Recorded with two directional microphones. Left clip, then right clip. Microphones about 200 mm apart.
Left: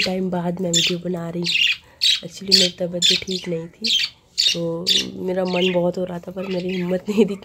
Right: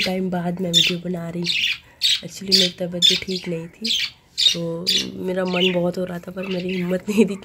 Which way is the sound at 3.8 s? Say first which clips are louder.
Left 3 dB; 55° left (ahead or behind).